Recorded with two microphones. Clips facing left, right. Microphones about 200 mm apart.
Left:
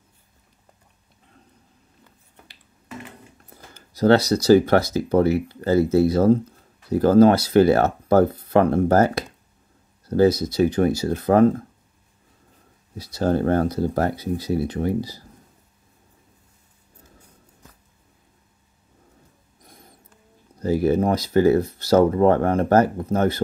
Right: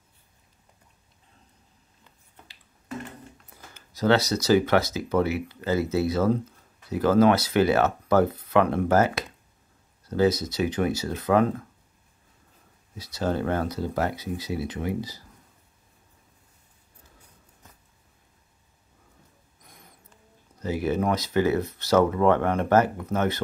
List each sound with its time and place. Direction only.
3.7 s speech: 35° left (ahead or behind)
5.5 s speech: 50° left (ahead or behind)
6.0 s speech: 35° left (ahead or behind)
12.9 s speech: 35° left (ahead or behind)
19.6 s a sound: 35° left (ahead or behind)
20.5 s speech: 35° left (ahead or behind)